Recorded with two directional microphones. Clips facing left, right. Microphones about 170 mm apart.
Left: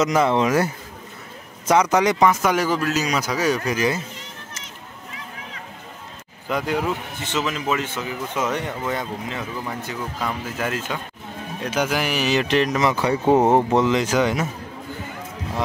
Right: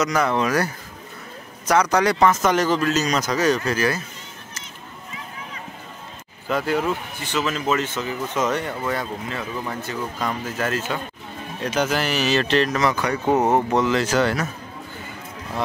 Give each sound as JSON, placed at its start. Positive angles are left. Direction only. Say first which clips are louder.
{"t": 0.0, "sound": "speech", "louder": "left 2 dB", "side_deg": 25}
{"t": 1.7, "sound": "a man's voice", "louder": "left 1 dB", "side_deg": 20}
{"t": 6.5, "sound": "a man's voice", "louder": "right 1 dB", "side_deg": 15}